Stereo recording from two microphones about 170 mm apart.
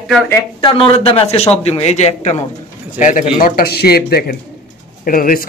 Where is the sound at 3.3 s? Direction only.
60° left (ahead or behind).